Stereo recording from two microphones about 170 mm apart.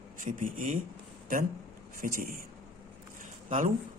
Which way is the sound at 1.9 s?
55° right (ahead or behind).